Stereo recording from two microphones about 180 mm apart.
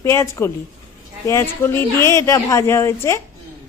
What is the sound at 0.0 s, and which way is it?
A woman's voice, 15° left (ahead or behind).